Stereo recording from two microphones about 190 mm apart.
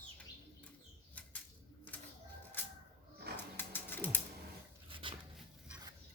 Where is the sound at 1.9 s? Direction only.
10° left (ahead or behind).